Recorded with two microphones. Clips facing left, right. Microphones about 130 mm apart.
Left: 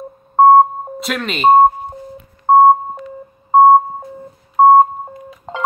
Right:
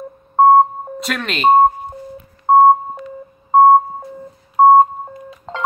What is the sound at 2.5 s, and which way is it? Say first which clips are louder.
Beep: left 1 dB; 5° left (ahead or behind).